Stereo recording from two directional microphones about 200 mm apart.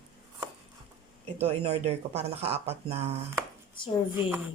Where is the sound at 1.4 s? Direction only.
30° right (ahead or behind).